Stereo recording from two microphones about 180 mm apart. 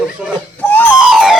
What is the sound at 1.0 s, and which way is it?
Siren, 5° right (ahead or behind).